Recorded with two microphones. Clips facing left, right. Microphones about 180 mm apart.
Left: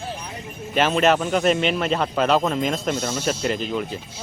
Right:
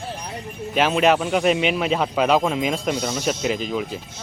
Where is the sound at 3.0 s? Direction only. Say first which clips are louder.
Right 1 dB; 5° left (ahead or behind).